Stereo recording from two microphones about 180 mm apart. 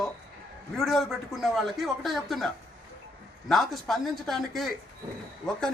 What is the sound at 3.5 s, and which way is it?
A man's voice, centre (ahead or behind).